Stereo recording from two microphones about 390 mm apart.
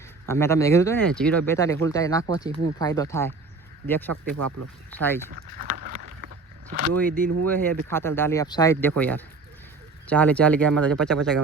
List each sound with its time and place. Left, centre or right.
0.3 s speech: centre
4.1 s speech: right
4.9 s speech: centre
5.5 s vehicle: right
7.4 s speech: centre